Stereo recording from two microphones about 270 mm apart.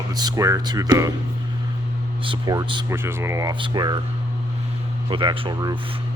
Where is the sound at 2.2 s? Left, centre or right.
Centre.